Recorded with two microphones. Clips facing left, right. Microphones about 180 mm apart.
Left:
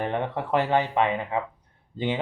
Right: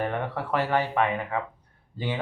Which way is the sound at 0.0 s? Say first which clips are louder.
Left 1 dB; 20° left (ahead or behind).